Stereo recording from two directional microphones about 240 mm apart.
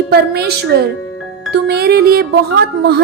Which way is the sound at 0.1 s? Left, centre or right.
Right.